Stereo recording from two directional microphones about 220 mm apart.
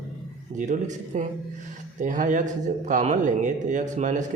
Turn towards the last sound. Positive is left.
turn(degrees=-35)  # may be behind; listen again after turning